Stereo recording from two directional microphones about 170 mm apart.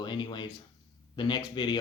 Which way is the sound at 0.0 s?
25° left (ahead or behind).